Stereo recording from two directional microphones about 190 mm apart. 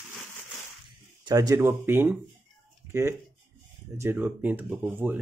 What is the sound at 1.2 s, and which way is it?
Speech, 20° right (ahead or behind).